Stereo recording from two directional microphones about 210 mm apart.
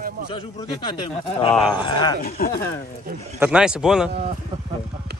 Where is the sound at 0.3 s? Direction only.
25° left (ahead or behind).